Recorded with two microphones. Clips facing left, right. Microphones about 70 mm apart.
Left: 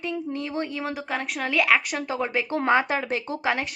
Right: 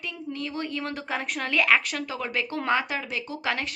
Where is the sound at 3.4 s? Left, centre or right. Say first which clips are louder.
Left 2 dB; centre.